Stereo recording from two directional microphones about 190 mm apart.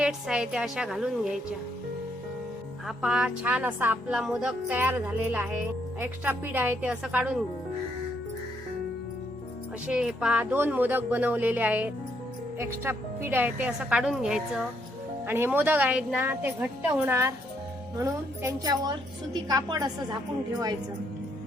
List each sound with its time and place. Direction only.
0.0 s a woman's voice: 5° right (ahead or behind)
2.8 s a woman's voice: 5° right (ahead or behind)
9.8 s a woman's voice: 5° right (ahead or behind); by 20.1 s 20° right (ahead or behind)